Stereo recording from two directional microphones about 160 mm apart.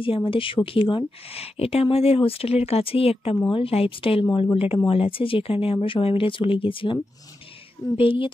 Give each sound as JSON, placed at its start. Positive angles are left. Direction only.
{"t": 0.0, "sound": "speech", "side_deg": 35}
{"t": 8.0, "sound": "speech", "side_deg": 35}